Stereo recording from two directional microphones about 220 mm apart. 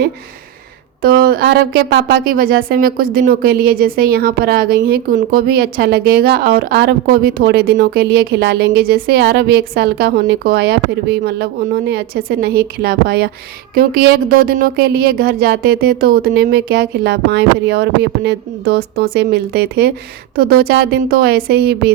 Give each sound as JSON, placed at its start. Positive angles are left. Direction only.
{"t": 1.0, "sound": "speech", "side_deg": -40}